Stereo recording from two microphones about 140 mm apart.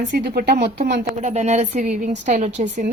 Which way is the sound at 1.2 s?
50° right (ahead or behind).